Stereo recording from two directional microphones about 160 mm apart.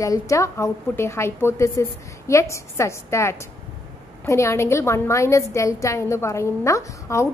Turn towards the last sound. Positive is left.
turn(degrees=20)  # may be behind; listen again after turning